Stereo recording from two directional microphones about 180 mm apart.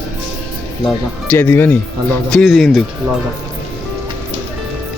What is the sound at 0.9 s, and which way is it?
Speech, 10° left (ahead or behind).